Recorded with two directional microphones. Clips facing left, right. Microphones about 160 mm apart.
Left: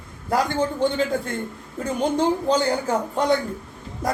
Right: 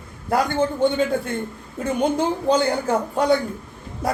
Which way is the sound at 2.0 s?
10° right (ahead or behind).